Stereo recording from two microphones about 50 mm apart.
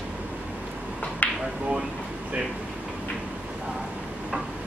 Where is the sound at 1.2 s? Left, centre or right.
Left.